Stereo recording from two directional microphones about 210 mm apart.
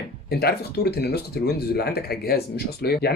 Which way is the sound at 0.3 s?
50° left (ahead or behind).